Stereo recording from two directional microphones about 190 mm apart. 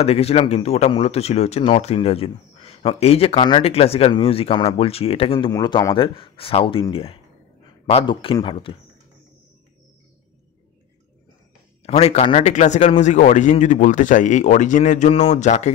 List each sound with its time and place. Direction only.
0.0 s a man's voice: 35° left (ahead or behind)
11.8 s speech: 35° left (ahead or behind)